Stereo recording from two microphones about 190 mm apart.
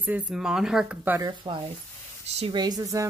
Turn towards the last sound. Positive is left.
turn(degrees=-15)  # may be behind; listen again after turning